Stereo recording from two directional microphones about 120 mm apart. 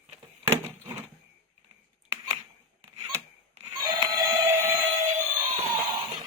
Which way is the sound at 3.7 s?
35° right (ahead or behind).